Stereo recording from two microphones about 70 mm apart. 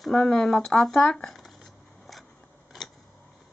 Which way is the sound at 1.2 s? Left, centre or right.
Centre.